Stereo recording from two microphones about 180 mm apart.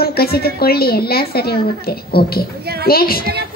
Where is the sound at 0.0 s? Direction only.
60° left (ahead or behind).